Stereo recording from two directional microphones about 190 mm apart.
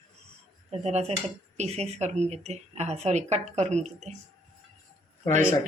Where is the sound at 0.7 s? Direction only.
35° right (ahead or behind).